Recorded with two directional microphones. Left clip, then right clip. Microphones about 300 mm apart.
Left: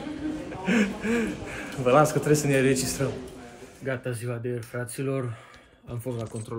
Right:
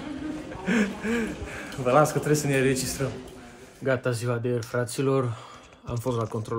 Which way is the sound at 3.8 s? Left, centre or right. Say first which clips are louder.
Right 6 dB; centre.